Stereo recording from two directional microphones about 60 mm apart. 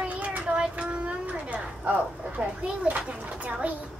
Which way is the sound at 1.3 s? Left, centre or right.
Right.